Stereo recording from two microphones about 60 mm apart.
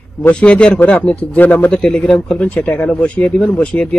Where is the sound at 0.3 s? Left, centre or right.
Centre.